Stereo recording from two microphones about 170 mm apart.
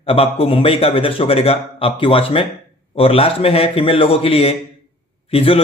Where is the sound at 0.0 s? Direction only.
35° left (ahead or behind).